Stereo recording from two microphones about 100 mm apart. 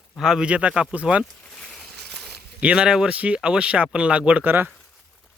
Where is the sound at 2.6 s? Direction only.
10° right (ahead or behind).